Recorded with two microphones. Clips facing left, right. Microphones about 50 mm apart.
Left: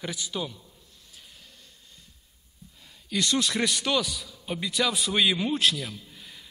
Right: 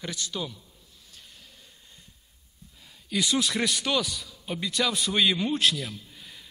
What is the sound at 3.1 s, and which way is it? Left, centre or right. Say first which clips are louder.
A man's voice: even; centre.